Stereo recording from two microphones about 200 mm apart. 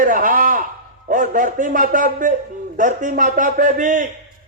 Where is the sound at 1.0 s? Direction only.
45° right (ahead or behind).